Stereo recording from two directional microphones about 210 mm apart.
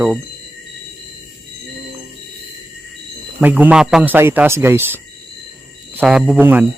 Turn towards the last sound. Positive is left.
turn(degrees=-5)  # may be behind; listen again after turning